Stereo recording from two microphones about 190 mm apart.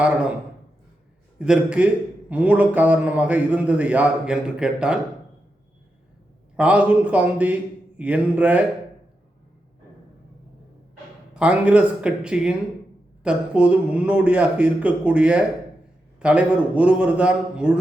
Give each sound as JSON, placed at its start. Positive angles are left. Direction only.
{"t": 1.4, "sound": "a man's voice", "side_deg": -5}
{"t": 6.6, "sound": "a man's voice", "side_deg": -5}
{"t": 11.3, "sound": "a man's voice", "side_deg": -5}